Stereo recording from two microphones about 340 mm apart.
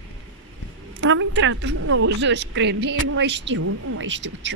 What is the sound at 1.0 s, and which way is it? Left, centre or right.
Speech, right.